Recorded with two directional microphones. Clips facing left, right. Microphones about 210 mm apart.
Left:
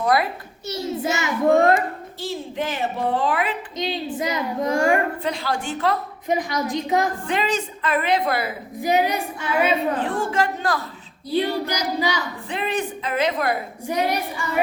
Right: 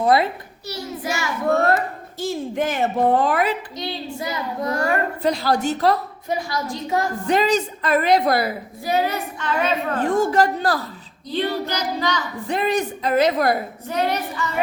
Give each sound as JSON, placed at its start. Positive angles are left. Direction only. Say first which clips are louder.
{"t": 0.0, "sound": "a child's voice", "louder": "right 3 dB", "side_deg": -25}
{"t": 0.7, "sound": "a child's voice", "louder": "left 3 dB", "side_deg": 25}
{"t": 2.2, "sound": "a woman's voice", "louder": "right 4 dB", "side_deg": -45}
{"t": 3.8, "sound": "a child's voice", "louder": "left 3 dB", "side_deg": 20}
{"t": 5.2, "sound": "a woman's voice", "louder": "right 6 dB", "side_deg": -40}
{"t": 6.2, "sound": "a child's voice", "louder": "left 3 dB", "side_deg": 20}
{"t": 7.3, "sound": "a woman's voice", "louder": "right 5 dB", "side_deg": -40}
{"t": 8.8, "sound": "a woman's voice", "louder": "left 2 dB", "side_deg": 15}
{"t": 10.0, "sound": "a woman's voice", "louder": "right 5 dB", "side_deg": -40}
{"t": 11.3, "sound": "a woman's voice", "louder": "left 1 dB", "side_deg": 10}
{"t": 12.5, "sound": "a woman's voice", "louder": "right 5 dB", "side_deg": -40}
{"t": 13.8, "sound": "a woman's voice", "louder": "left 1 dB", "side_deg": 10}